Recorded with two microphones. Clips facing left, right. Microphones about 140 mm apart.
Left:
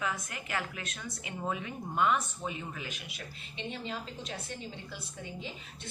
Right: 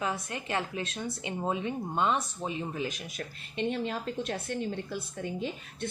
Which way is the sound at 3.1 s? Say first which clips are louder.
Right 5 dB; 50° right (ahead or behind).